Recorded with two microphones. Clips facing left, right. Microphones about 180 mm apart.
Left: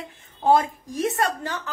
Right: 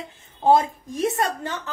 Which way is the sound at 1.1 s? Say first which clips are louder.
Even; 20° right (ahead or behind).